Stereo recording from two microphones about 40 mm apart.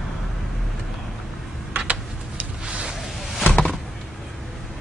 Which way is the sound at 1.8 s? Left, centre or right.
Right.